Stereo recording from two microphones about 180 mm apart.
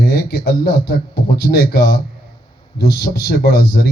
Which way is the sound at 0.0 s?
60° left (ahead or behind).